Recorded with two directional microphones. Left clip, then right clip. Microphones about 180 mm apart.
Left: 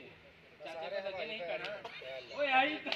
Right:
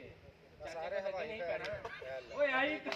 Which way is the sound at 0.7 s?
10° right (ahead or behind).